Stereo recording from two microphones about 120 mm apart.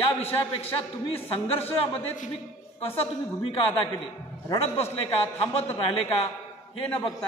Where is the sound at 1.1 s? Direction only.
50° left (ahead or behind).